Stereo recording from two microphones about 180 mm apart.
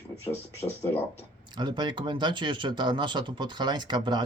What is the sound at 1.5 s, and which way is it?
Speech, 25° right (ahead or behind).